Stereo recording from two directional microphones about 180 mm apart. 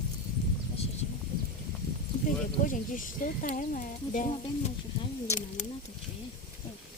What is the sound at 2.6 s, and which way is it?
Speech, 45° left (ahead or behind).